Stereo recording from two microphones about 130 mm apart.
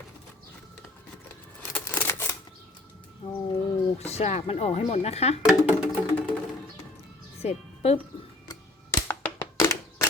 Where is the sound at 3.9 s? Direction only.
55° left (ahead or behind).